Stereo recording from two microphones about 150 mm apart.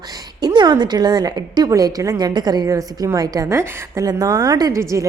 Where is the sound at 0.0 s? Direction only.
25° right (ahead or behind).